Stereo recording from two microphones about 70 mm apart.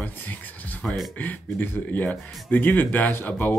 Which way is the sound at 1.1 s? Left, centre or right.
Left.